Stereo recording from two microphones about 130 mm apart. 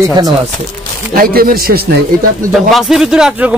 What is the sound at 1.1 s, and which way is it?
Speech, 90° right.